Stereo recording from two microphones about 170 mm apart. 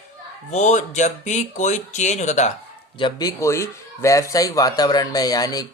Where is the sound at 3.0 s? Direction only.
20° left (ahead or behind).